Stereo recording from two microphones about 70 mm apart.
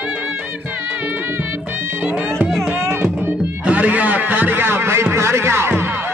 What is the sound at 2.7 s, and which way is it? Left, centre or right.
Music, right.